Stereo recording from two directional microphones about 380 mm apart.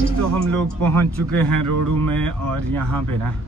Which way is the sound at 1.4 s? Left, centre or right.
Right.